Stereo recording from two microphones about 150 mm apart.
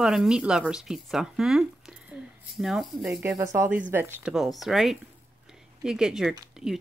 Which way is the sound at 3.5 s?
15° right (ahead or behind).